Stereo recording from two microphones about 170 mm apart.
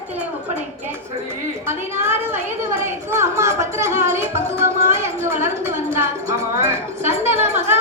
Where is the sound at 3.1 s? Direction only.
15° right (ahead or behind).